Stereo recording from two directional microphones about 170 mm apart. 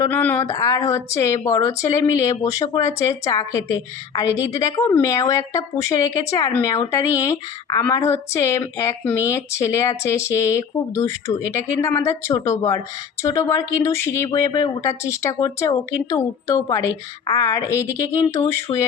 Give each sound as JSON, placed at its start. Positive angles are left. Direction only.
{"t": 0.0, "sound": "speech", "side_deg": 10}